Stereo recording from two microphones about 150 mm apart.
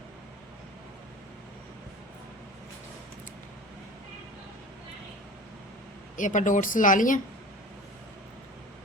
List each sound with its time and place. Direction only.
6.1 s a woman's voice: 60° left (ahead or behind)